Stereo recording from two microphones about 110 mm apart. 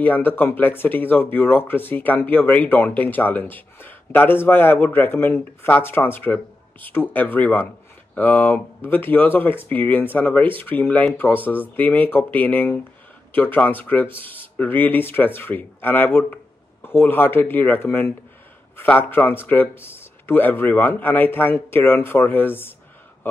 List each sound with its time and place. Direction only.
0.0 s speech: 15° left (ahead or behind)